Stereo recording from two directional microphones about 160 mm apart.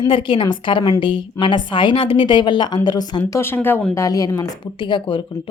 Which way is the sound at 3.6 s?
15° left (ahead or behind).